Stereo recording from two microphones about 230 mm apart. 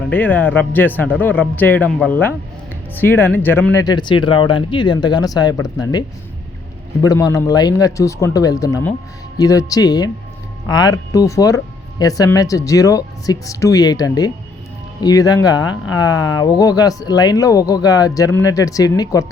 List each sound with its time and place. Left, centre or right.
0.1 s speech: centre